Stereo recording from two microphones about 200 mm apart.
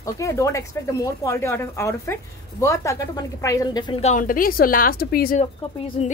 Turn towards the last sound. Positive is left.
turn(degrees=30)  # may be behind; listen again after turning